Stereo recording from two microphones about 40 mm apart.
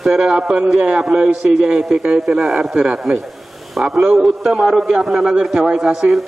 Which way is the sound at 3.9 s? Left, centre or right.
Centre.